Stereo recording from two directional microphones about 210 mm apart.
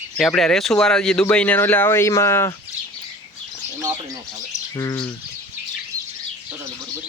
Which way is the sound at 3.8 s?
15° right (ahead or behind).